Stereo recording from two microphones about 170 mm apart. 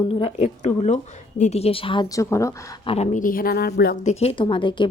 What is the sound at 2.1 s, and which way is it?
Speech, 15° left (ahead or behind).